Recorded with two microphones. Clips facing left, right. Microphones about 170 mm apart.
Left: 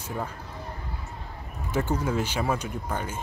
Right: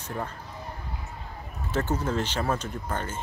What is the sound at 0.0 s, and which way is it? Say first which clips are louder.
Speech: left 1 dB; 5° left (ahead or behind).